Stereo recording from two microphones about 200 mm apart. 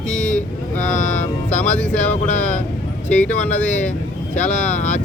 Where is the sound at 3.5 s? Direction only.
35° left (ahead or behind).